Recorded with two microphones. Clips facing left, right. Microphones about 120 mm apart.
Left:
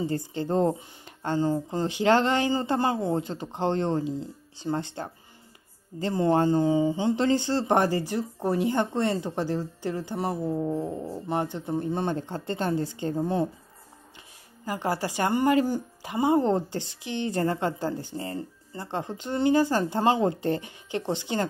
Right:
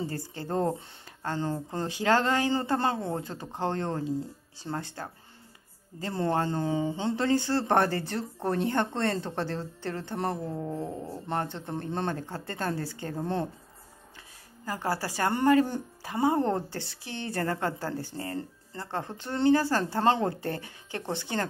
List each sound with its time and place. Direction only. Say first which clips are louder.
0.0 s a woman's voice: left 6 dB; 20° left (ahead or behind)
6.1 s a woman's voice: left 6 dB; 20° left (ahead or behind)
14.6 s a woman's voice: left 3 dB; 20° left (ahead or behind)